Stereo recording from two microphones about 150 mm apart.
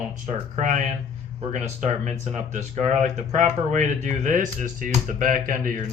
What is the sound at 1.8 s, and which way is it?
Speech, 55° right (ahead or behind).